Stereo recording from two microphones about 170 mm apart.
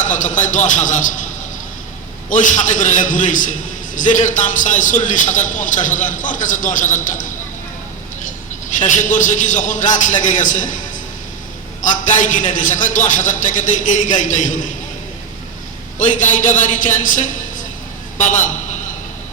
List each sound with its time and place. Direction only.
0.0 s a man's voice: 50° left (ahead or behind)
2.3 s a man's voice: 45° left (ahead or behind)
8.8 s a man's voice: 45° left (ahead or behind)
16.0 s a man's voice: 50° left (ahead or behind)